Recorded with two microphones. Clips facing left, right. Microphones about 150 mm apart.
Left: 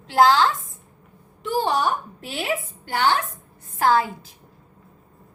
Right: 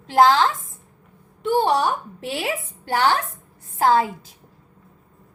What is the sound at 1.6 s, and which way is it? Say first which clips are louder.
Speech: right 2 dB; 70° right (ahead or behind).